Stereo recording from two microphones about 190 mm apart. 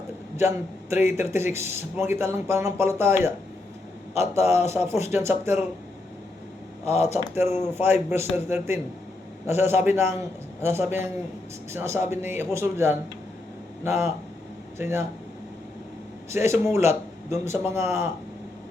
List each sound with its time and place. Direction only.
0.3 s a man's voice: 10° right (ahead or behind)
4.2 s a man's voice: 35° left (ahead or behind)
4.7 s speech: 15° right (ahead or behind)
6.8 s a man's voice: 35° left (ahead or behind)
7.3 s speech: 15° right (ahead or behind)
9.8 s speech: 10° right (ahead or behind)
16.3 s speech: 15° right (ahead or behind)